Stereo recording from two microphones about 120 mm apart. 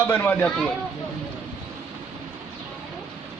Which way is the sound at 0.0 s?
20° left (ahead or behind).